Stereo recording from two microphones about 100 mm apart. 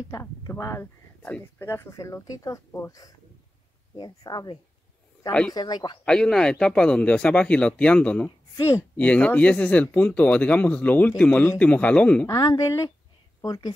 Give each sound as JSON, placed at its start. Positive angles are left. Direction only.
{"t": 0.1, "sound": "a woman's voice", "side_deg": 30}
{"t": 6.0, "sound": "speech", "side_deg": 10}
{"t": 8.5, "sound": "speech", "side_deg": 30}
{"t": 8.9, "sound": "speech", "side_deg": 15}
{"t": 12.3, "sound": "a woman's voice", "side_deg": 35}